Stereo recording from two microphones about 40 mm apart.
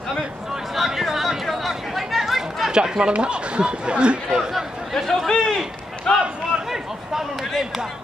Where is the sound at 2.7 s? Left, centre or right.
Centre.